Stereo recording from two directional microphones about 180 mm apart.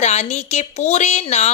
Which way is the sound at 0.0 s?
40° left (ahead or behind).